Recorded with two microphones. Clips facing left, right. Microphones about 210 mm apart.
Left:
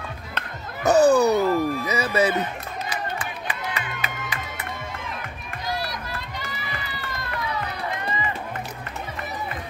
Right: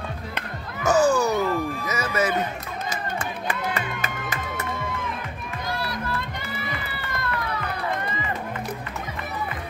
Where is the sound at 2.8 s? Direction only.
45° right (ahead or behind).